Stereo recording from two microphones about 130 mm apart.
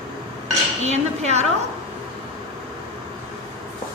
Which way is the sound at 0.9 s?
60° right (ahead or behind).